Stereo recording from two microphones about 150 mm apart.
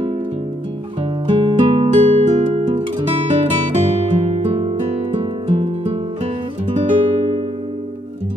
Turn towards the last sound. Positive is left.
turn(degrees=-45)  # may be behind; listen again after turning